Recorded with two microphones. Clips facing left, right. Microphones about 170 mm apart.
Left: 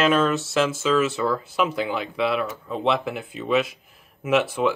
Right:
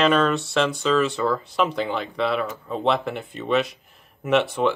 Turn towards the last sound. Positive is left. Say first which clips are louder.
# right 1 dB
turn(degrees=0)  # may be behind; listen again after turning